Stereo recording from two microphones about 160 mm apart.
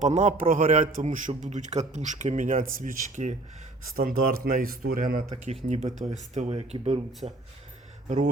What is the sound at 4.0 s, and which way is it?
Speech, 65° right (ahead or behind).